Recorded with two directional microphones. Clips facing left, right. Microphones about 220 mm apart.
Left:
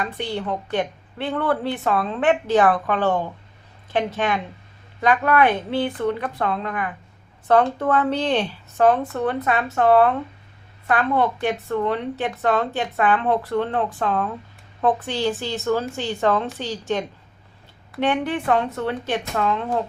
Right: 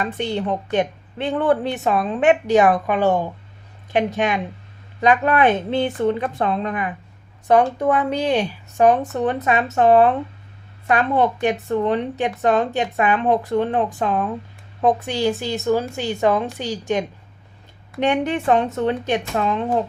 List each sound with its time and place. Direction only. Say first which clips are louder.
0.0 s a woman's voice: right 3 dB; 20° right (ahead or behind)